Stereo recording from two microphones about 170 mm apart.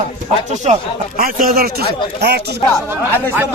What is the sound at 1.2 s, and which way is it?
A man's voice, 55° right (ahead or behind).